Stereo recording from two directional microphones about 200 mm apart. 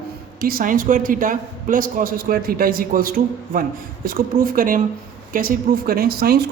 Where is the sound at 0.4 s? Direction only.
45° right (ahead or behind).